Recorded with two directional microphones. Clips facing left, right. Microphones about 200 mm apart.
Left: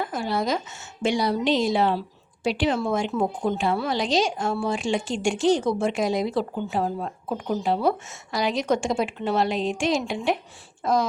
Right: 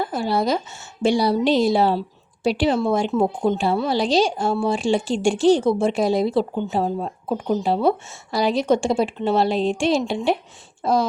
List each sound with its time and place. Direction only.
0.0 s speech: 30° right (ahead or behind)